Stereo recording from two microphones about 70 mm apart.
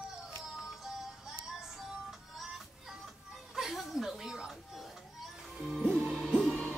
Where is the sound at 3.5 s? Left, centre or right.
Centre.